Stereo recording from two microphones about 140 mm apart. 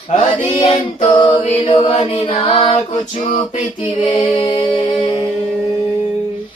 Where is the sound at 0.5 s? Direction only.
35° left (ahead or behind).